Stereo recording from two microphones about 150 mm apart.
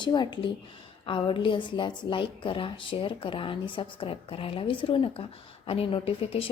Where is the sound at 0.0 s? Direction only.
30° left (ahead or behind).